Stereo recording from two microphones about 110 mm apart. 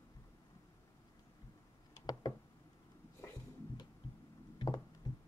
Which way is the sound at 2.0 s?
35° left (ahead or behind).